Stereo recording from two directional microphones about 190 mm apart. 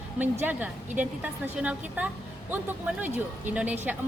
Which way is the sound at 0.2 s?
10° right (ahead or behind).